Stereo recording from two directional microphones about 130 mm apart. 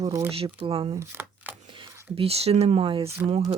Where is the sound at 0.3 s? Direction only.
45° right (ahead or behind).